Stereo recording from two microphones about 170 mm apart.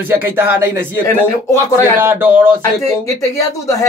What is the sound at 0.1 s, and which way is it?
Speech, 15° right (ahead or behind).